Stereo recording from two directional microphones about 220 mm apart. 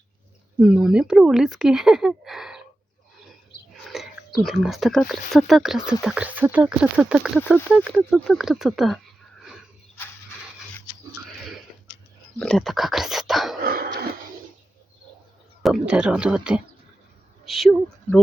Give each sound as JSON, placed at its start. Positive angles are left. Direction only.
{"t": 0.6, "sound": "speech", "side_deg": -5}
{"t": 3.9, "sound": "speech", "side_deg": 0}
{"t": 12.4, "sound": "speech", "side_deg": 0}
{"t": 13.6, "sound": "a sound", "side_deg": -45}
{"t": 15.6, "sound": "speech", "side_deg": 0}